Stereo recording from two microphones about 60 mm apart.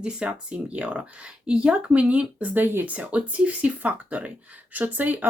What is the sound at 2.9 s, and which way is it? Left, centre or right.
Speech, right.